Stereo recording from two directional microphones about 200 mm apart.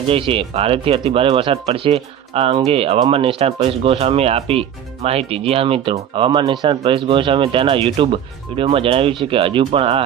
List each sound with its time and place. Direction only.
0.1 s speech: 25° right (ahead or behind)